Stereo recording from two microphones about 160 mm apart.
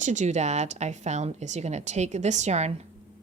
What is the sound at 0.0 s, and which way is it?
A woman's voice, 50° right (ahead or behind).